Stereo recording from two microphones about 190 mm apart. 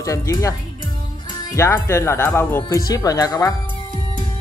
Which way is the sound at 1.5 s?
15° left (ahead or behind).